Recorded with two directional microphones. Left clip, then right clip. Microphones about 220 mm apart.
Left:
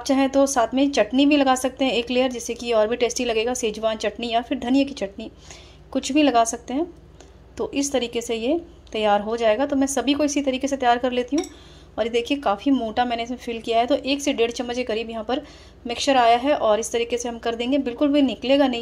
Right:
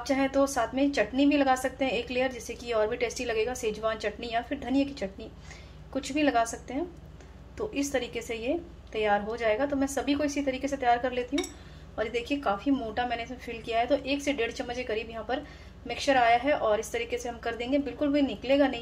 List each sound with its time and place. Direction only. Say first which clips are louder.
0.0 s a woman's voice: left 7 dB; 35° left (ahead or behind)